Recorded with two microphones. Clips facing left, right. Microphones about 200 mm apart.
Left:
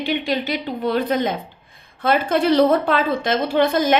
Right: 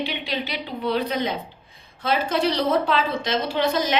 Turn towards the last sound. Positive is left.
turn(degrees=50)  # may be behind; listen again after turning